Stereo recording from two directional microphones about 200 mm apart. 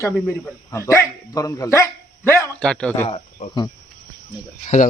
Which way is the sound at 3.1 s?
25° left (ahead or behind).